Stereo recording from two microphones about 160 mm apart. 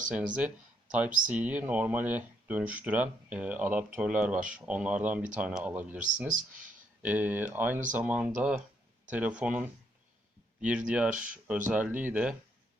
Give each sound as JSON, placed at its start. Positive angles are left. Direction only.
{"t": 0.1, "sound": "speech", "side_deg": -5}